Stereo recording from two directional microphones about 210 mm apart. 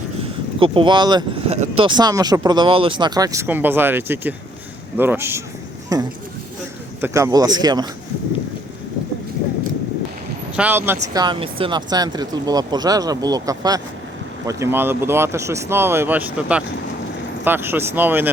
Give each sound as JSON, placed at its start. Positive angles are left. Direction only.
{"t": 0.6, "sound": "speech", "side_deg": -25}
{"t": 10.5, "sound": "speech", "side_deg": -10}